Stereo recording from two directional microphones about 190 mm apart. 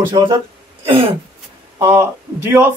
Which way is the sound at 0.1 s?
25° right (ahead or behind).